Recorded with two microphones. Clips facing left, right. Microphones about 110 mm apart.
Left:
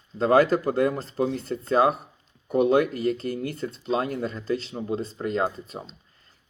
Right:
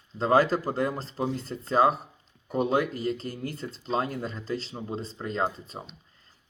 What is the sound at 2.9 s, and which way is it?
Speech, 50° left (ahead or behind).